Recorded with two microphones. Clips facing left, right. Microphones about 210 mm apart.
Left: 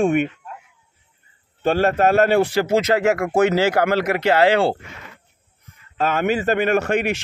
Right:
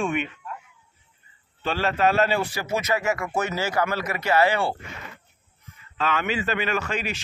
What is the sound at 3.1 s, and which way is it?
Speech, 70° left (ahead or behind).